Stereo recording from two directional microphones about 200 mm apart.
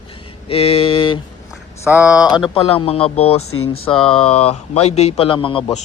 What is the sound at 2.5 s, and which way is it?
Speech, 25° left (ahead or behind).